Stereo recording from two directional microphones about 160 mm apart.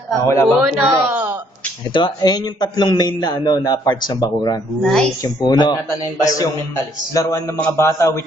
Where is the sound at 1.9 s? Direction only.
25° left (ahead or behind).